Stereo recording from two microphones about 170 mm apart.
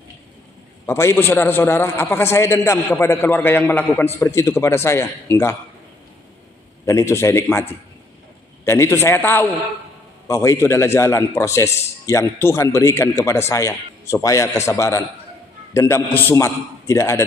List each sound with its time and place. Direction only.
0.8 s a man's voice: 15° left (ahead or behind)
6.9 s a man's voice: 15° left (ahead or behind)
8.6 s a man's voice: 15° left (ahead or behind)